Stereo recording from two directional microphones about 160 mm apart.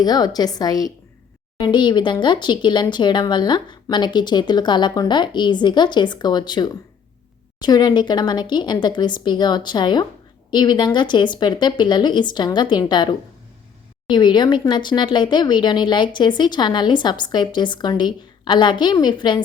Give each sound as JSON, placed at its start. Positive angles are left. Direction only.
{"t": 0.0, "sound": "speech", "side_deg": 25}